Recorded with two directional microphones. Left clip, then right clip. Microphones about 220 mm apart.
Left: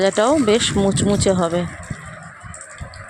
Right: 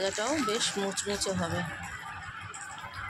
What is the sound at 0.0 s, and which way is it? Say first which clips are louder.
Speech: left 14 dB; 35° left (ahead or behind).